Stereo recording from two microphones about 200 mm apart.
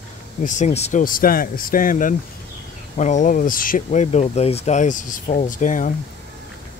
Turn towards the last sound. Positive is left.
turn(degrees=40)  # may be behind; listen again after turning